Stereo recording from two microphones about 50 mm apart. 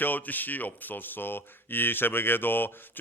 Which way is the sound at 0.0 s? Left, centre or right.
Left.